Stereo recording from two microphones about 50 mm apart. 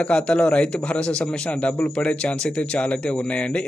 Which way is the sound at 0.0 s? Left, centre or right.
Left.